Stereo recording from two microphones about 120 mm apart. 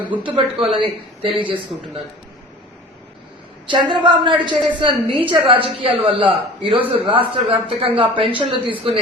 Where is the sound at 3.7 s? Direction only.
40° right (ahead or behind).